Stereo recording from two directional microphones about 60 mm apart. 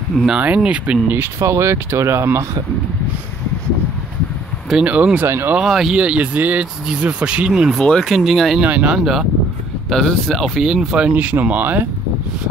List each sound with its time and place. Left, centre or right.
0.1 s speech: centre
0.6 s speech: right
1.4 s speech: right
4.8 s speech: right
5.2 s speech: right
5.7 s speech: centre
5.9 s speech: centre
6.3 s speech: right
8.0 s speech: centre
8.6 s speech: right
8.9 s speech: centre
9.8 s speech: centre
11.0 s speech: right